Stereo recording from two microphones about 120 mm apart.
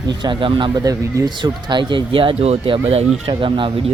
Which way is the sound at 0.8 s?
30° right (ahead or behind).